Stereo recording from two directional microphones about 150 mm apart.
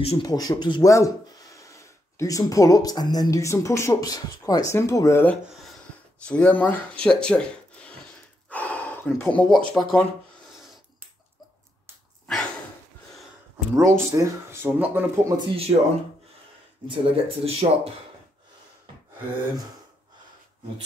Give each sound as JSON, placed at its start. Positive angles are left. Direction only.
{"t": 0.0, "sound": "speech", "side_deg": 40}
{"t": 0.3, "sound": "speech", "side_deg": 25}
{"t": 8.5, "sound": "gasp", "side_deg": 10}
{"t": 13.7, "sound": "speech", "side_deg": -20}
{"t": 15.3, "sound": "speech", "side_deg": -40}
{"t": 16.8, "sound": "speech", "side_deg": -35}